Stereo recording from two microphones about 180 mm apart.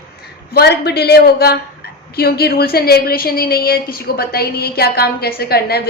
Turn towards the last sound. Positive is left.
turn(degrees=60)  # may be behind; listen again after turning